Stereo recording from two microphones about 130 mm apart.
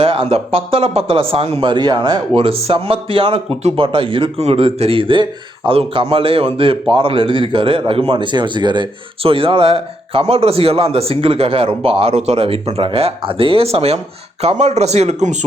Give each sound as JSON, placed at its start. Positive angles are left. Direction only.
{"t": 0.0, "sound": "speech", "side_deg": -45}